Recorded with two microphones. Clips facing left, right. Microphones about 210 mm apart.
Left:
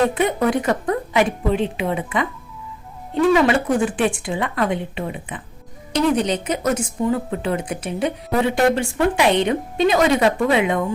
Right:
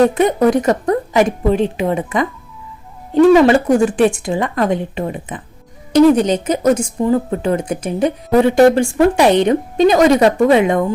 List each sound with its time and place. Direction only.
0.1 s speech: 40° right (ahead or behind)
3.3 s speech: 40° right (ahead or behind)